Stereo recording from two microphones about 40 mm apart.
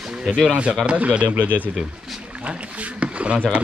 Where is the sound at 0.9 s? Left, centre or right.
Right.